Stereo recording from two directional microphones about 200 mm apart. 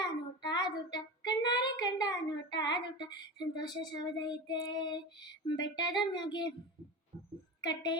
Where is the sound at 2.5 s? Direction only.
20° left (ahead or behind).